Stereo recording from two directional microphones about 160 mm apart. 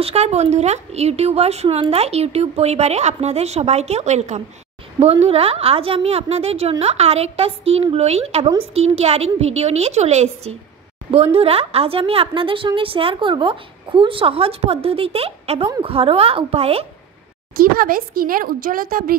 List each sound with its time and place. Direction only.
0.0 s a woman's voice: 40° right (ahead or behind)
17.6 s speech: 65° right (ahead or behind)